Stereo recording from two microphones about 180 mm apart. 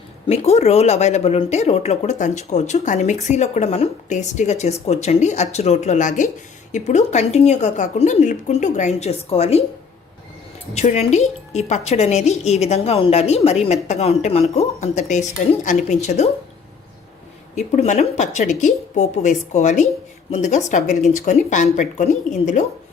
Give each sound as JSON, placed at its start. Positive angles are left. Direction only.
{"t": 0.3, "sound": "speech", "side_deg": 35}
{"t": 10.8, "sound": "speech", "side_deg": 40}
{"t": 17.5, "sound": "speech", "side_deg": 40}